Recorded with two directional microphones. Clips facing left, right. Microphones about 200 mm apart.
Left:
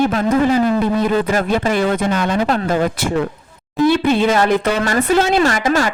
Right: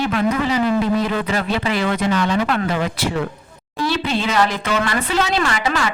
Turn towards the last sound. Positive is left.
turn(degrees=45)  # may be behind; listen again after turning